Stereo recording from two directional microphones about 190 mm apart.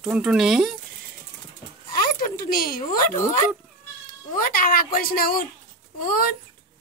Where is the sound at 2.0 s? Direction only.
50° left (ahead or behind).